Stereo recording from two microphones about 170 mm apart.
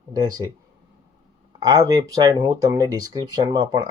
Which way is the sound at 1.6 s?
20° right (ahead or behind).